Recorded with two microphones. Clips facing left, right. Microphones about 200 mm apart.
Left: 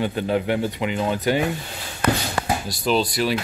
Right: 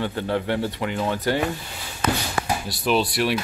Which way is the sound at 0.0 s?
15° left (ahead or behind).